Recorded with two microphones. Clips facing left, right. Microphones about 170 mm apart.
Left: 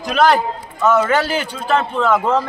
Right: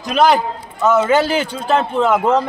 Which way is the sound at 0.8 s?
20° right (ahead or behind).